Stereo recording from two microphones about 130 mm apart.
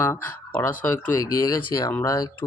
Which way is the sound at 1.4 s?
30° left (ahead or behind).